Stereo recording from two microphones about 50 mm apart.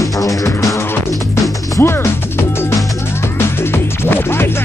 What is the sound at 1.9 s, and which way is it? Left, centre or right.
Music, left.